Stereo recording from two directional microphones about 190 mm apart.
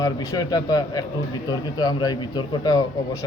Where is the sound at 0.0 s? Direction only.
20° left (ahead or behind).